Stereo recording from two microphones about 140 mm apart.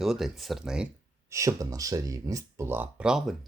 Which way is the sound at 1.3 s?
20° right (ahead or behind).